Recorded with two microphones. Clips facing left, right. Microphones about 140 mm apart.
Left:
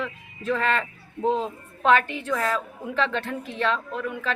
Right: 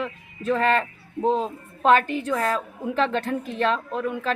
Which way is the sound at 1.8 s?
40° right (ahead or behind).